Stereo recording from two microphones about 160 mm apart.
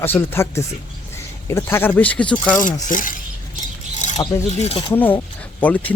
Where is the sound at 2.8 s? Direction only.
55° left (ahead or behind).